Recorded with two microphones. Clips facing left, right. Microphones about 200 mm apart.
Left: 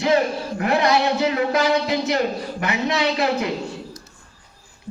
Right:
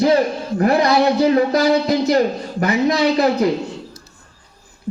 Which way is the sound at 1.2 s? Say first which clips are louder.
Right 5 dB; 35° right (ahead or behind).